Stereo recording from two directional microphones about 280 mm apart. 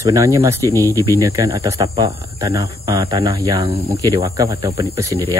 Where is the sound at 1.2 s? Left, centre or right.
Centre.